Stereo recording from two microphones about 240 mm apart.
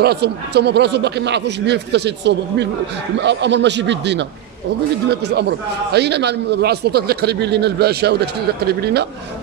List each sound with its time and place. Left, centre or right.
0.0 s a man's voice: right